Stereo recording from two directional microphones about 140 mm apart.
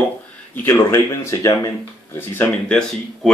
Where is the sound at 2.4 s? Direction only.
5° left (ahead or behind).